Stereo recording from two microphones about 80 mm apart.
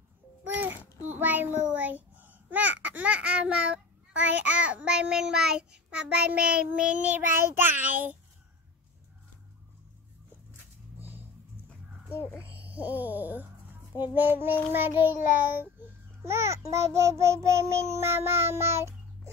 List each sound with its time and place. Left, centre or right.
0.6 s a child's voice: right
7.5 s child singing: right
11.0 s vehicle: right
12.5 s speech: centre
14.1 s child singing: right
16.3 s child singing: right